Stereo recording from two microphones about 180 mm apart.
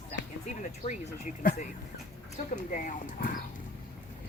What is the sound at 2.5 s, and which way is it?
Speech, 45° left (ahead or behind).